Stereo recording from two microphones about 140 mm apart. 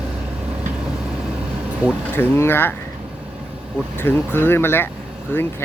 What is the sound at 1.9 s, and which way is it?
Speech, 15° left (ahead or behind).